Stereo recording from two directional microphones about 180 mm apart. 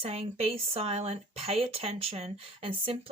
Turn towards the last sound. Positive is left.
turn(degrees=-30)  # may be behind; listen again after turning